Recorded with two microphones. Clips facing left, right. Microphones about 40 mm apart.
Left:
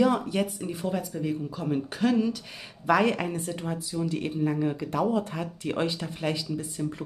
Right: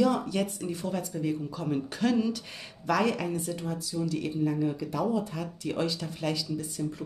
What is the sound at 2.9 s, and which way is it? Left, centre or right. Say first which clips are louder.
Speech: left 3 dB; left.